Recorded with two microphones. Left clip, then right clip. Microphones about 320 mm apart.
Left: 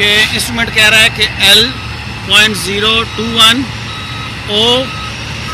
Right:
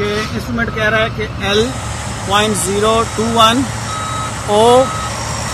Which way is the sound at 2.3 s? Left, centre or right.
Centre.